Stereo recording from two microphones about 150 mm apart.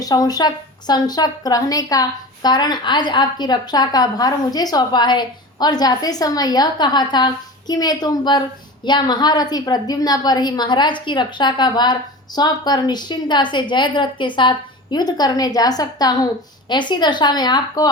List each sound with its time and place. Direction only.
0.0 s a woman's voice: 25° left (ahead or behind)